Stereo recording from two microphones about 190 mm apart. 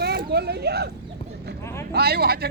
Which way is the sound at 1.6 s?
15° left (ahead or behind).